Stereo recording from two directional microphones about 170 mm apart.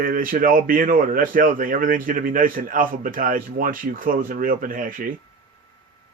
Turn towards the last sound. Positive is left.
turn(degrees=-55)  # may be behind; listen again after turning